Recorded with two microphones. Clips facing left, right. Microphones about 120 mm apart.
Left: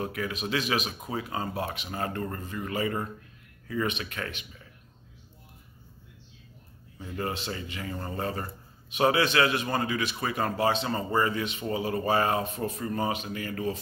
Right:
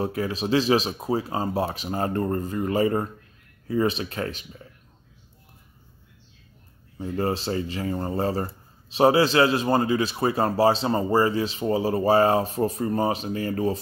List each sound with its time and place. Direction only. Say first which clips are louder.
0.0 s speech: right 6 dB; 35° right (ahead or behind)
7.0 s speech: right 7 dB; 35° right (ahead or behind)